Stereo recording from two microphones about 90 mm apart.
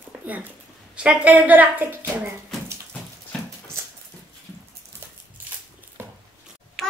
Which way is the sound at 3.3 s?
10° left (ahead or behind).